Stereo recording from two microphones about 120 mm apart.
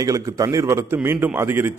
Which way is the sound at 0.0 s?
30° right (ahead or behind).